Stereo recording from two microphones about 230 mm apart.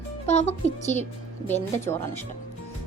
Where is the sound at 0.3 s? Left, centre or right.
Left.